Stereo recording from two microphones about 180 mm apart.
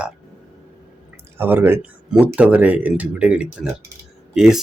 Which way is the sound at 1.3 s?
10° right (ahead or behind).